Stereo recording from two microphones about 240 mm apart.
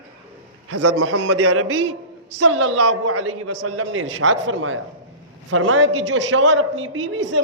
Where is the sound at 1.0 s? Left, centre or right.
Right.